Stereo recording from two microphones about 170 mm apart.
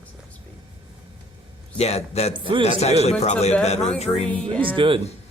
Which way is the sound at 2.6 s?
40° left (ahead or behind).